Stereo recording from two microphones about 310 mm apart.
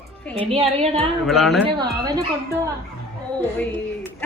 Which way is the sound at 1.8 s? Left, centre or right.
Centre.